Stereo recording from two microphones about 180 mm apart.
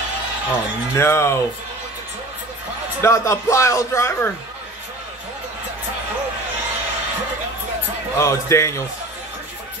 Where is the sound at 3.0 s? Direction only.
15° left (ahead or behind).